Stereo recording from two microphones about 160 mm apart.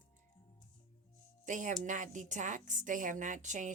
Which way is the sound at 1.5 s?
50° right (ahead or behind).